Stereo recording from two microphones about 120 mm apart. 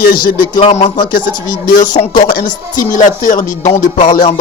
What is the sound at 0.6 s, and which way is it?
Speech, 65° left (ahead or behind).